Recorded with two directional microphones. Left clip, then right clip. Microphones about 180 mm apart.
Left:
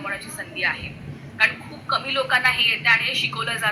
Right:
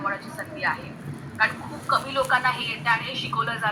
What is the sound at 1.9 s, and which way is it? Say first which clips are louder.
A woman's voice: left 1 dB; 15° left (ahead or behind).